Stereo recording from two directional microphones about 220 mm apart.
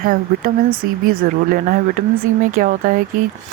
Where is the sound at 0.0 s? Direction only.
40° right (ahead or behind).